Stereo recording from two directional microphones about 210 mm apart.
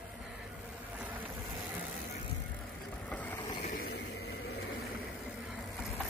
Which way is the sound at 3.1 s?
5° left (ahead or behind).